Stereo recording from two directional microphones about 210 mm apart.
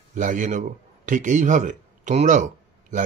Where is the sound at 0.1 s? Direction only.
35° right (ahead or behind).